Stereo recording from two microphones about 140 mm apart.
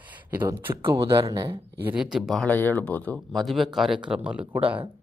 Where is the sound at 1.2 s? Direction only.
30° right (ahead or behind).